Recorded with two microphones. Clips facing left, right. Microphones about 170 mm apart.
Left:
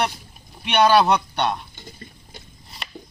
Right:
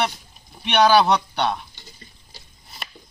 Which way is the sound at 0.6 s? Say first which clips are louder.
Even; centre (ahead or behind).